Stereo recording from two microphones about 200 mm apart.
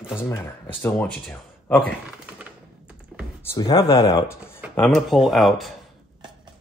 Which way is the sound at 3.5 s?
20° left (ahead or behind).